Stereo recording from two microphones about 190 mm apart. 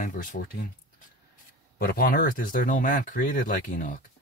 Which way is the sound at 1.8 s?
50° left (ahead or behind).